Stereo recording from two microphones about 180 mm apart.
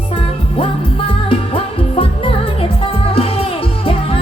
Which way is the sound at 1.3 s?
30° left (ahead or behind).